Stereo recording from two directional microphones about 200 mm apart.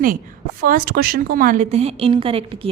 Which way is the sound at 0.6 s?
45° right (ahead or behind).